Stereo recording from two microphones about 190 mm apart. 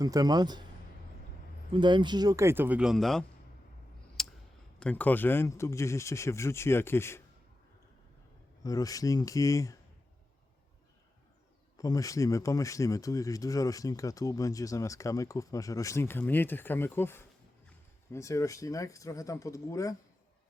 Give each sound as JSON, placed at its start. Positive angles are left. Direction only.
{"t": 0.0, "sound": "speech", "side_deg": -20}
{"t": 1.7, "sound": "speech", "side_deg": -25}
{"t": 4.2, "sound": "clicking", "side_deg": 0}
{"t": 4.8, "sound": "speech", "side_deg": 5}
{"t": 8.6, "sound": "speech", "side_deg": 20}
{"t": 11.8, "sound": "speech", "side_deg": 20}